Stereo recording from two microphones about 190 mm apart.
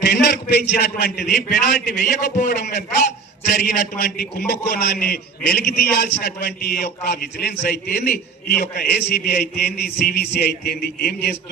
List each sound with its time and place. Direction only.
0.1 s a man's voice: 55° left (ahead or behind)